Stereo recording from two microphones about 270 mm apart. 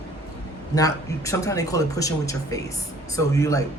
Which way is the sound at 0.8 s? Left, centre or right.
Centre.